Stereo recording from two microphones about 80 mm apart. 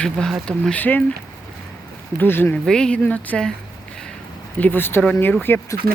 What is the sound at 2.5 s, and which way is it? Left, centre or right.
Speech, centre.